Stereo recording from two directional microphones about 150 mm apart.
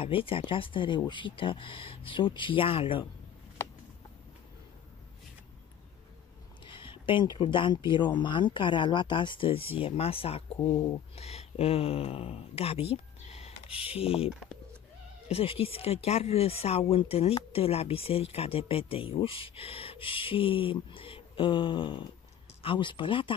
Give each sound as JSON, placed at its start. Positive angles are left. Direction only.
{"t": 0.0, "sound": "speech", "side_deg": 35}
{"t": 6.6, "sound": "speech", "side_deg": 35}